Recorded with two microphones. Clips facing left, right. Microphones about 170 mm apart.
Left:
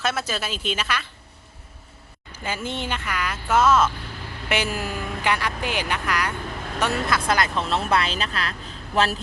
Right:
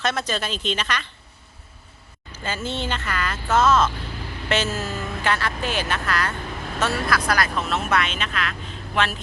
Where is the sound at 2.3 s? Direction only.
10° left (ahead or behind).